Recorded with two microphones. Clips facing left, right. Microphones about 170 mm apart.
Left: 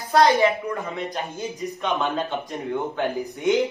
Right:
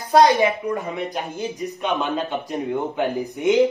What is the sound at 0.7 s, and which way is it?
Speech, 20° right (ahead or behind).